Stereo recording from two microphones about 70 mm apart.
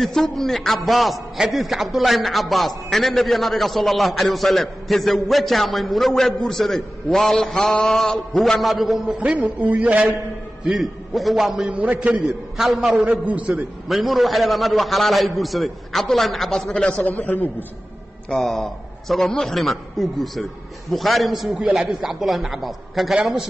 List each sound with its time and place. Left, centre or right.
0.0 s a man's voice: centre
9.2 s a man's voice: centre
10.7 s a man's voice: centre
11.7 s a man's voice: right
12.2 s a man's voice: centre
12.9 s a man's voice: centre
13.8 s a man's voice: centre
16.7 s a man's voice: centre
18.3 s a man's voice: centre
21.5 s a man's voice: centre